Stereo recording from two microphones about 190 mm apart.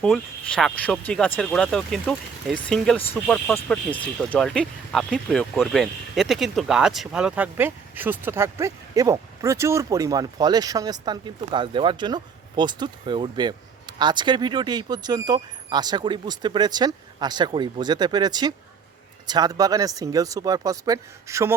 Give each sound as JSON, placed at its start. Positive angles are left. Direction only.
{"t": 0.0, "sound": "speech", "side_deg": 5}